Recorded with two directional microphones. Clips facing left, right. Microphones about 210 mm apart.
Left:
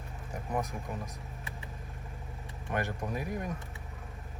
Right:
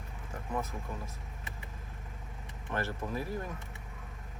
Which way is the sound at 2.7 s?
15° left (ahead or behind).